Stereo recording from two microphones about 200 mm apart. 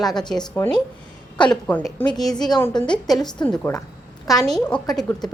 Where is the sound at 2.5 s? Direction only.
20° left (ahead or behind).